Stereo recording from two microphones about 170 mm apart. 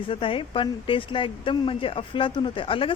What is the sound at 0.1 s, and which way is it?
A woman's voice, 30° left (ahead or behind).